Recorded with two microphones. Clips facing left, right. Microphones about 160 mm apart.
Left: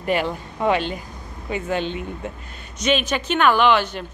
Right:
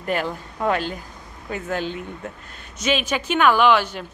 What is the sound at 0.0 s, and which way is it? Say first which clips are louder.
A woman's voice: left 2 dB; centre (ahead or behind).